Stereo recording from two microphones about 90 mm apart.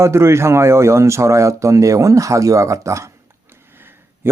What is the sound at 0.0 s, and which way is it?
A man's voice, 30° right (ahead or behind).